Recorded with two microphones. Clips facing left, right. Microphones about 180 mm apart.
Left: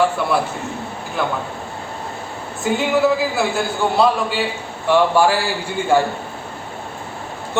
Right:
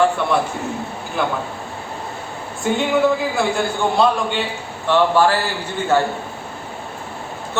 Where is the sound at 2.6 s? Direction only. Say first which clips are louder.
Even; 5° left (ahead or behind).